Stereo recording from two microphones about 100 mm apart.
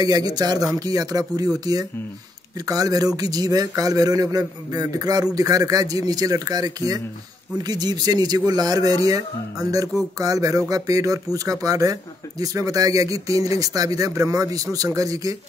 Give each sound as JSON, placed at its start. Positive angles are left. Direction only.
{"t": 0.0, "sound": "speech", "side_deg": -40}